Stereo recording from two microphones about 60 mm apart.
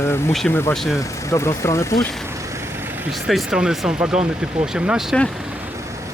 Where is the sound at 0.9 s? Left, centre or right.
Left.